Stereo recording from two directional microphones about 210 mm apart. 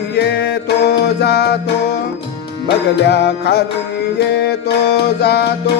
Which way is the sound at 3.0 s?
50° left (ahead or behind).